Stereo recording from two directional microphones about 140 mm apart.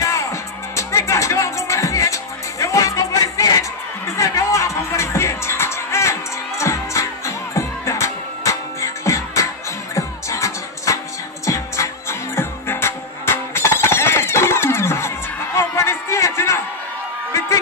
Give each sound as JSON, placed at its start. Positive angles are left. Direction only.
{"t": 0.0, "sound": "music", "side_deg": 20}